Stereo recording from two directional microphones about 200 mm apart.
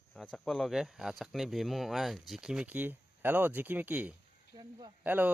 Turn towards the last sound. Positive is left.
turn(degrees=-10)  # may be behind; listen again after turning